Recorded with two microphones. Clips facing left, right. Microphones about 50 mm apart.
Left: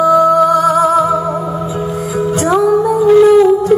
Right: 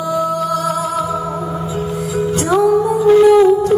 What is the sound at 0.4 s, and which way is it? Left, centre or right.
Music, centre.